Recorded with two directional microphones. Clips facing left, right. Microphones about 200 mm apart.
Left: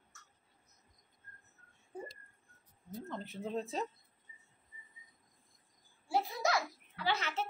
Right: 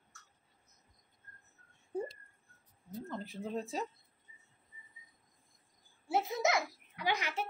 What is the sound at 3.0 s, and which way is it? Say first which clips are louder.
Speech: even; centre (ahead or behind).